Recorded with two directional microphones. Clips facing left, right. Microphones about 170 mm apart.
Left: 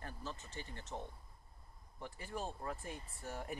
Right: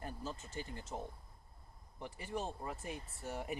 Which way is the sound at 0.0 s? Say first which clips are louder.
Right 3 dB; 10° right (ahead or behind).